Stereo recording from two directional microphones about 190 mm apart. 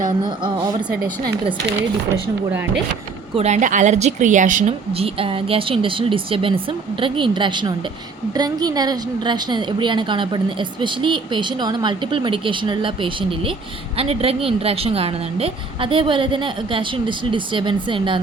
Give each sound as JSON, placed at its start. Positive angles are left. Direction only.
{"t": 0.3, "sound": "a woman's voice", "side_deg": -25}
{"t": 3.3, "sound": "a woman's voice", "side_deg": -35}